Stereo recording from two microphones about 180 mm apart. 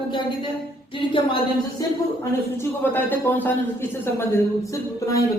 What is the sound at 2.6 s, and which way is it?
Speech, 10° left (ahead or behind).